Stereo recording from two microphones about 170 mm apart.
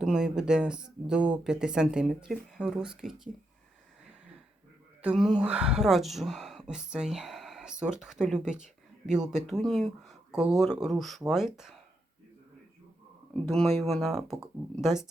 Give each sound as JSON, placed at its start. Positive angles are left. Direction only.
{"t": 0.0, "sound": "speech", "side_deg": -5}
{"t": 5.0, "sound": "speech", "side_deg": -5}
{"t": 13.3, "sound": "speech", "side_deg": 5}
{"t": 13.7, "sound": "speech", "side_deg": -40}
{"t": 13.9, "sound": "speech", "side_deg": 0}